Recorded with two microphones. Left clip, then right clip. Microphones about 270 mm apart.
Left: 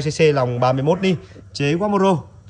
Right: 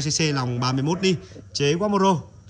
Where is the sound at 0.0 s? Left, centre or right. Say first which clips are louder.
Left 8 dB; centre.